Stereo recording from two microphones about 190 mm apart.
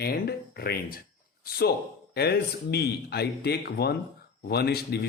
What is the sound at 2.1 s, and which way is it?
Speech, 60° left (ahead or behind).